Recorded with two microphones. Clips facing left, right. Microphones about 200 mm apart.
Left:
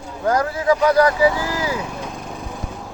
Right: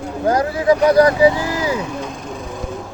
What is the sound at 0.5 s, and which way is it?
Speech, 15° right (ahead or behind).